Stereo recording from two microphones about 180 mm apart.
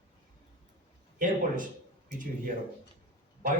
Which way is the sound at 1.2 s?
45° right (ahead or behind).